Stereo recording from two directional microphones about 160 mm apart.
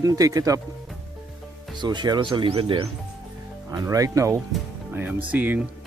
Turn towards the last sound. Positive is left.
turn(degrees=-10)  # may be behind; listen again after turning